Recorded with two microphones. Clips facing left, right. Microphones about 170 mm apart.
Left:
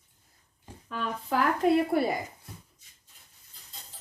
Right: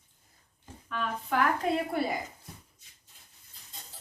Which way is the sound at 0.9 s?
35° left (ahead or behind).